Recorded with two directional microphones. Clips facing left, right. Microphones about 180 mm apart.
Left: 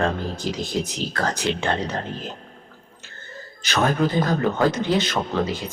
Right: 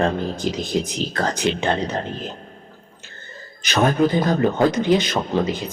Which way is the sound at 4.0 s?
15° right (ahead or behind).